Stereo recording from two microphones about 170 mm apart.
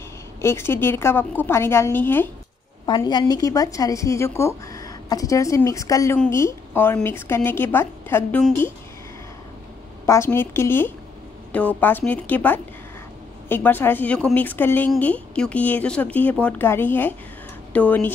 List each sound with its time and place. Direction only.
0.4 s speech: 15° left (ahead or behind)
2.9 s speech: 25° left (ahead or behind)
10.0 s speech: 15° left (ahead or behind)